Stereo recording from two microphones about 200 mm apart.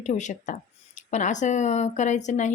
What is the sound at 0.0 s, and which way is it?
Speech, 35° left (ahead or behind).